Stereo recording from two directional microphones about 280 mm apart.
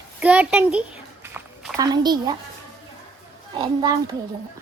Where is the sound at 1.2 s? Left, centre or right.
Centre.